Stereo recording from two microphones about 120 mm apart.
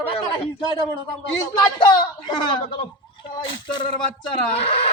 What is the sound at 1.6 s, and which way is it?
Speech, 40° left (ahead or behind).